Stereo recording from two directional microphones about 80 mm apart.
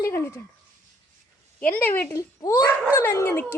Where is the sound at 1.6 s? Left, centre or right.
Left.